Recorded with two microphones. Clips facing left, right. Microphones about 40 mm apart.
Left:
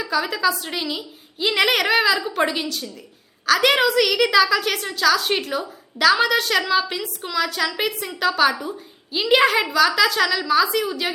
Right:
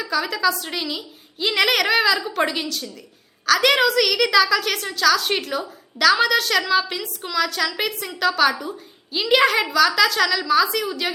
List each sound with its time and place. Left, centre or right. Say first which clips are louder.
0.0 s a woman's voice: even; centre